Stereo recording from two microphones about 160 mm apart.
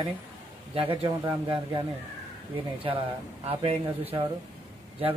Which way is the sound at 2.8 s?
35° right (ahead or behind).